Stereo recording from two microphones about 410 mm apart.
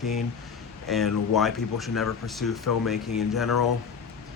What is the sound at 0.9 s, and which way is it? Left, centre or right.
Speech, centre.